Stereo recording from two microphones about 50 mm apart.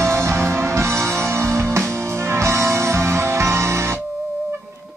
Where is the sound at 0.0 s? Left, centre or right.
Right.